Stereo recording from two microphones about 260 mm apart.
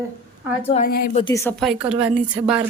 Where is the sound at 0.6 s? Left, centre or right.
Left.